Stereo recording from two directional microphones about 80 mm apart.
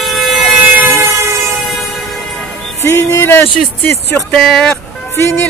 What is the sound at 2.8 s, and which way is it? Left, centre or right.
Music, left.